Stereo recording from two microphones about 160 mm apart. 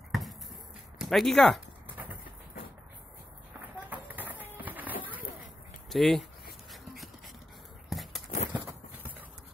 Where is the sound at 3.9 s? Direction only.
10° right (ahead or behind).